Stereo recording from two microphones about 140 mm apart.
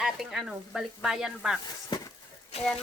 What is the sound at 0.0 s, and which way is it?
Speech, 5° right (ahead or behind).